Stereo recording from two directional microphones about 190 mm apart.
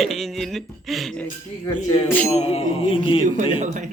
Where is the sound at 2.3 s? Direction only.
35° left (ahead or behind).